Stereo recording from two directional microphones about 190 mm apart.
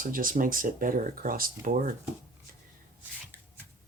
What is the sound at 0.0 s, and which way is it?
Speech, 45° right (ahead or behind).